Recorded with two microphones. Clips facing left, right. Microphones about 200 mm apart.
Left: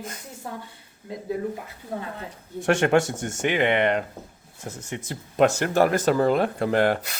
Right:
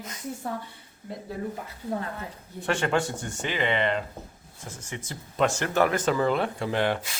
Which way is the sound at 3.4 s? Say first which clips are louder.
Left 5 dB; 60° left (ahead or behind).